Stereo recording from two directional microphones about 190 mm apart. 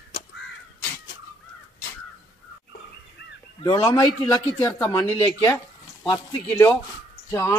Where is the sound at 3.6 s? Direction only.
20° left (ahead or behind).